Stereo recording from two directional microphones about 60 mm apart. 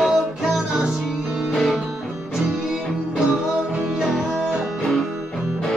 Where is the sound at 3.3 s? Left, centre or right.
Centre.